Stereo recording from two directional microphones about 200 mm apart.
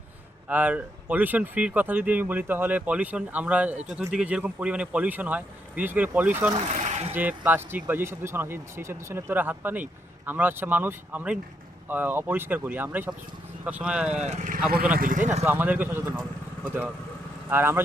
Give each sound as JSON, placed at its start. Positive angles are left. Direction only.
{"t": 0.4, "sound": "speech", "side_deg": -5}
{"t": 6.7, "sound": "a sound", "side_deg": -35}
{"t": 7.1, "sound": "speech", "side_deg": -10}
{"t": 14.2, "sound": "speech", "side_deg": -35}
{"t": 15.4, "sound": "speech", "side_deg": -10}